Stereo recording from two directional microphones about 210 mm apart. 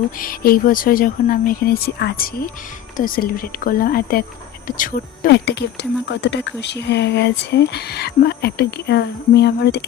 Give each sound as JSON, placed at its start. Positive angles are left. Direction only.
{"t": 0.2, "sound": "speech", "side_deg": 45}